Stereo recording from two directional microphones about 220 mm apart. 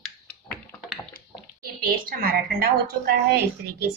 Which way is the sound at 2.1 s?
45° right (ahead or behind).